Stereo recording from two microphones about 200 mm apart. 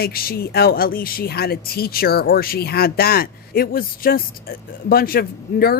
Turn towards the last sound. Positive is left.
turn(degrees=50)  # may be behind; listen again after turning